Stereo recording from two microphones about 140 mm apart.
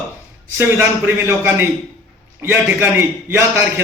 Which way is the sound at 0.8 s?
15° right (ahead or behind).